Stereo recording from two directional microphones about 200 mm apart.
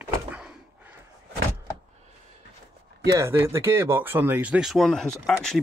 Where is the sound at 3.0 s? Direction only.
15° right (ahead or behind).